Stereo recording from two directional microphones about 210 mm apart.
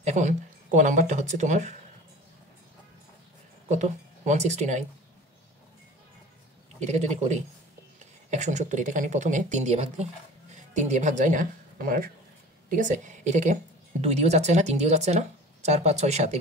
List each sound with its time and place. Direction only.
0.0 s speech: 35° right (ahead or behind)
3.6 s speech: 35° right (ahead or behind)
6.8 s a woman's voice: 35° right (ahead or behind)